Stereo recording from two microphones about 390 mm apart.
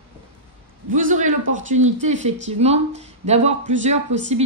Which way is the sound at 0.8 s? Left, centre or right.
Centre.